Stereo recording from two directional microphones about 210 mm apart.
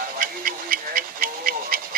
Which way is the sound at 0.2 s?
45° right (ahead or behind).